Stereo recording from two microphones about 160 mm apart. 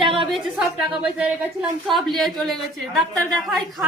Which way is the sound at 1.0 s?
5° right (ahead or behind).